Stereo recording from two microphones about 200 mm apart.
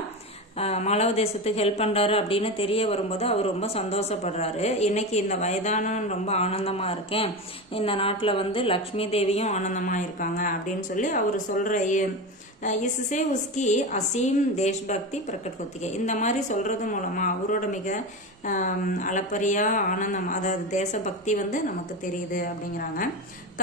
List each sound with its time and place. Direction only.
0.6 s speech: 30° left (ahead or behind)